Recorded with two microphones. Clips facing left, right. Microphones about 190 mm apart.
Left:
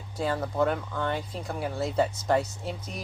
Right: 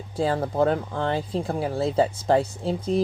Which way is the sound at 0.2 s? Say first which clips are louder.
Right 4 dB; 30° right (ahead or behind).